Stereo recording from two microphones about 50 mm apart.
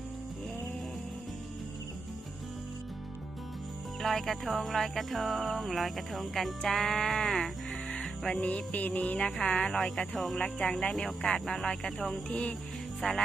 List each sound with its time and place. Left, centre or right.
4.0 s music: centre
6.6 s speech: centre
8.4 s music: left
9.7 s speech: centre
12.3 s speech: centre
13.0 s music: centre